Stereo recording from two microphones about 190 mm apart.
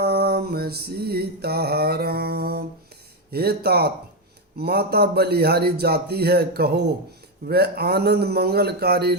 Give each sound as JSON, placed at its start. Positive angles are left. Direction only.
{"t": 0.0, "sound": "mantra", "side_deg": -55}
{"t": 3.3, "sound": "a man's voice", "side_deg": -55}